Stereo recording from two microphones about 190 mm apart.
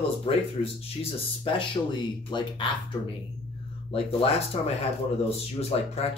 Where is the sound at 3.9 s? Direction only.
30° left (ahead or behind).